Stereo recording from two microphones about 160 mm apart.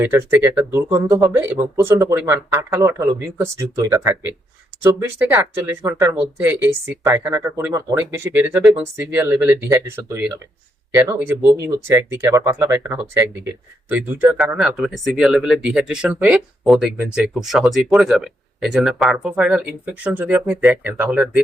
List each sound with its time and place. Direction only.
0.0 s speech: 15° right (ahead or behind)